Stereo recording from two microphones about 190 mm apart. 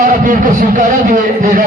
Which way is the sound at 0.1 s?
45° right (ahead or behind).